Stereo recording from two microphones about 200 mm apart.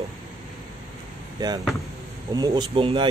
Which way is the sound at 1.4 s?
20° right (ahead or behind).